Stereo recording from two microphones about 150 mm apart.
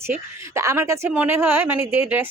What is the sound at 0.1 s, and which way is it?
Speech, 20° right (ahead or behind).